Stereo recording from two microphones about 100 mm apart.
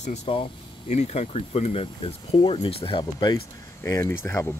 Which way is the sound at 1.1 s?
90° left.